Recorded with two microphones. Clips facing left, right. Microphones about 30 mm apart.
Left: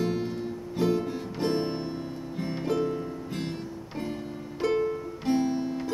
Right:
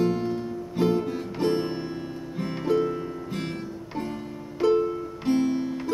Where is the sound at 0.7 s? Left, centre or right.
Centre.